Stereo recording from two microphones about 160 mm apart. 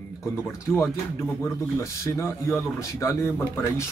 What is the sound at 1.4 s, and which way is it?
A man's voice, 20° left (ahead or behind).